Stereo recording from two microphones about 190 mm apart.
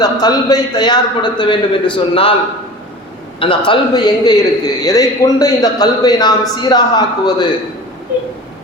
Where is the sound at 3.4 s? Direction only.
25° left (ahead or behind).